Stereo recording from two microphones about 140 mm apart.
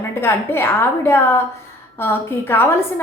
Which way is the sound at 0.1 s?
15° left (ahead or behind).